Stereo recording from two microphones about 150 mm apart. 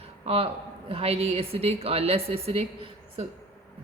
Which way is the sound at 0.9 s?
40° right (ahead or behind).